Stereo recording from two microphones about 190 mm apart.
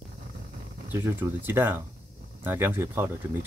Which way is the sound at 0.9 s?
10° right (ahead or behind).